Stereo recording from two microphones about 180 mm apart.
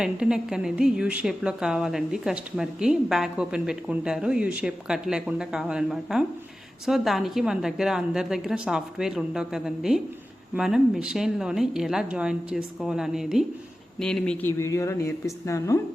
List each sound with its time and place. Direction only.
0.0 s a woman's voice: 5° right (ahead or behind)
14.6 s speech: 15° left (ahead or behind)